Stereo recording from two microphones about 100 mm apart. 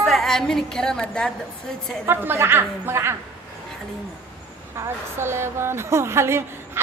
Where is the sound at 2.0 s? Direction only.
20° right (ahead or behind).